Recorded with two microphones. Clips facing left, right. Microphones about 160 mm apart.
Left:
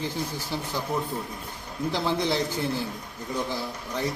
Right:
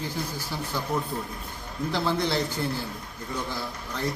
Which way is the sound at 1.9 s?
20° left (ahead or behind).